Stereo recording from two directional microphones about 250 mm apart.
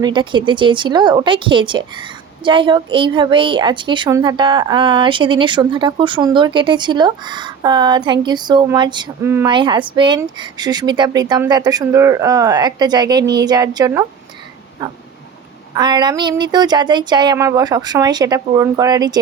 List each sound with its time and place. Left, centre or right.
0.0 s speech: centre